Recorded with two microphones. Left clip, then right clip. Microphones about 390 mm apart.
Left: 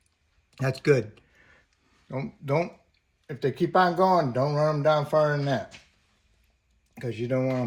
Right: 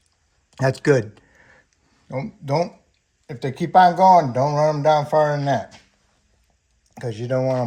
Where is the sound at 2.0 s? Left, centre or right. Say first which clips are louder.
Right 4 dB; right.